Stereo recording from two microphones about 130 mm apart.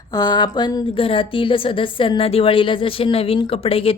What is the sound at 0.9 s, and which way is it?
A woman's voice, 45° left (ahead or behind).